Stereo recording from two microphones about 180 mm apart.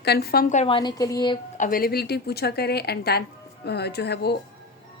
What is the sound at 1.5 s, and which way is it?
A woman's voice, 50° left (ahead or behind).